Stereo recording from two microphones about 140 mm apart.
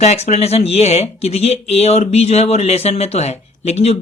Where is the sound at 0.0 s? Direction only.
50° left (ahead or behind).